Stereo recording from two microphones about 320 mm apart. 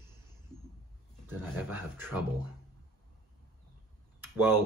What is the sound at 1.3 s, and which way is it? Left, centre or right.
Speech, centre.